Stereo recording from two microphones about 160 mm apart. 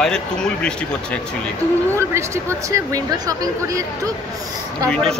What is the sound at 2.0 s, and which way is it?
Speech, 20° right (ahead or behind).